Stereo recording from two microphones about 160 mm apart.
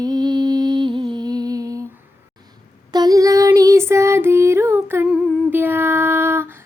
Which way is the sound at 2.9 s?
25° right (ahead or behind).